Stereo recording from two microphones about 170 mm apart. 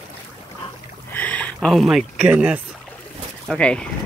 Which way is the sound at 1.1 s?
10° left (ahead or behind).